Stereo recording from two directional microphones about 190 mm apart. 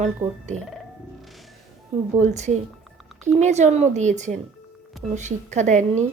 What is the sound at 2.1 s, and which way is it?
Speech, 40° right (ahead or behind).